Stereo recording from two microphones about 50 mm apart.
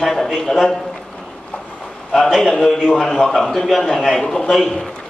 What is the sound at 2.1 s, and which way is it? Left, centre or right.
A man's voice, centre.